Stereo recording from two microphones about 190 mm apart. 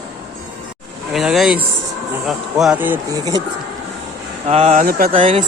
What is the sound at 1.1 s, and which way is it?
Speech, centre (ahead or behind).